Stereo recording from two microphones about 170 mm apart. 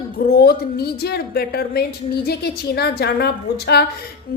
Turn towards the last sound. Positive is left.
turn(degrees=70)  # may be behind; listen again after turning